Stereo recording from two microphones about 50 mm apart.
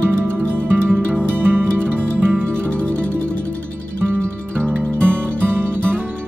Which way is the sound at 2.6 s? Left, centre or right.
Left.